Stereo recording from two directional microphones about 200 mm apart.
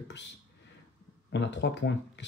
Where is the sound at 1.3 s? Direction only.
60° left (ahead or behind).